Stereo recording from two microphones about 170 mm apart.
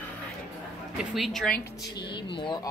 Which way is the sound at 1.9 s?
25° left (ahead or behind).